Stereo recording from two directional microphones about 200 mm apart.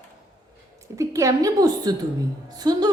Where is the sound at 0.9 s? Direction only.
15° right (ahead or behind).